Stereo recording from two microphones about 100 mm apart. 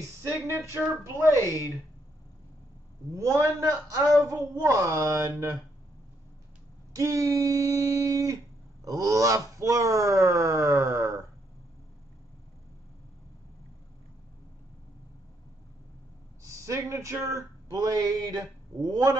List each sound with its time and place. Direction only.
0.5 s speech: 30° right (ahead or behind)
1.4 s speech: 35° left (ahead or behind)
3.1 s speech: 30° right (ahead or behind)
7.0 s speech: 35° right (ahead or behind)
16.4 s speech: 30° right (ahead or behind)